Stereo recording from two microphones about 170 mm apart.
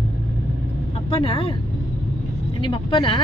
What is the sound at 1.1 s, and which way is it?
Speech, 30° left (ahead or behind).